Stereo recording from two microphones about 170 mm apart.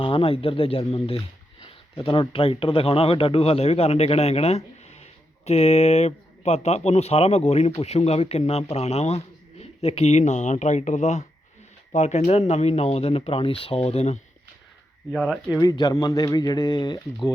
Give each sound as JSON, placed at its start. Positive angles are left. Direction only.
{"t": 0.0, "sound": "speech", "side_deg": 35}
{"t": 15.1, "sound": "speech", "side_deg": -5}
{"t": 15.5, "sound": "speech", "side_deg": 25}